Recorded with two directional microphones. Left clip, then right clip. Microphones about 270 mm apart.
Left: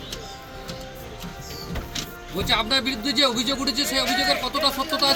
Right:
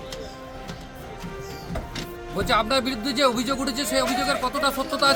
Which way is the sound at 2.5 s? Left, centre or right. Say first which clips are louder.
Even; right.